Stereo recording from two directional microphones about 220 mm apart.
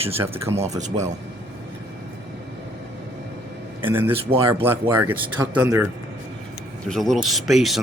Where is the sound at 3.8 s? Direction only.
10° right (ahead or behind).